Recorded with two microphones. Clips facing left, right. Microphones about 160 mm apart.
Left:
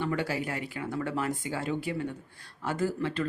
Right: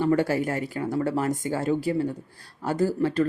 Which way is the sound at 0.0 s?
40° right (ahead or behind).